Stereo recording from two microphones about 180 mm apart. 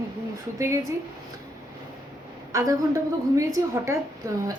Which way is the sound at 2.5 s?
15° right (ahead or behind).